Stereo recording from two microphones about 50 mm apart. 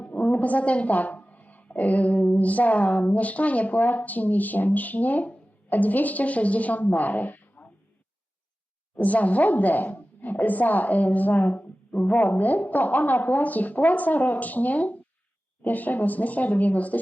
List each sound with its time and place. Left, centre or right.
0.0 s a woman's voice: left
9.0 s a woman's voice: left